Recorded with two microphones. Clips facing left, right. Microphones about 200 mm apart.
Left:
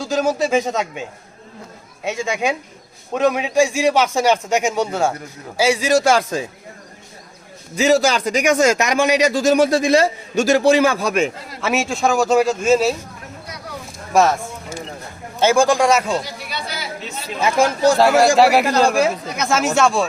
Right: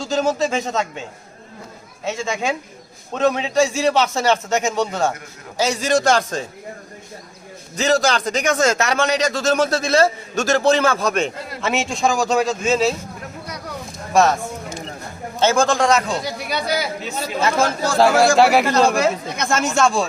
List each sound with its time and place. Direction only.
0.0 s a man's voice: 10° left (ahead or behind)
2.0 s a man's voice: 15° left (ahead or behind)
7.8 s a man's voice: 10° left (ahead or behind)
14.1 s a sound: 10° left (ahead or behind)
15.4 s a man's voice: 10° left (ahead or behind)
16.2 s speech: 40° right (ahead or behind)
17.4 s a man's voice: 15° left (ahead or behind)
17.9 s speech: centre (ahead or behind)